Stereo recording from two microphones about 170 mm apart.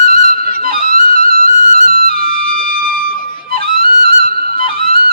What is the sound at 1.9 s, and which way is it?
Trumpet, 60° right (ahead or behind).